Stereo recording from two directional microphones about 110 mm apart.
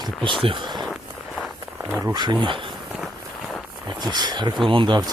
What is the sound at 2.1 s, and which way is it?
Speech, 45° right (ahead or behind).